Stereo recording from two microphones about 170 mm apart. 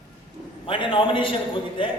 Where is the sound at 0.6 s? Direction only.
30° left (ahead or behind).